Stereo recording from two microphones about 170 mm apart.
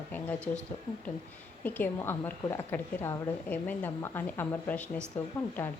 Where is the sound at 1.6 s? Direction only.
10° left (ahead or behind).